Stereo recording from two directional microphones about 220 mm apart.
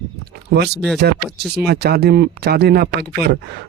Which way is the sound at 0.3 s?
50° right (ahead or behind).